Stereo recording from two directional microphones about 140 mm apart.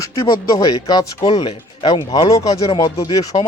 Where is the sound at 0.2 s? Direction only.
25° left (ahead or behind).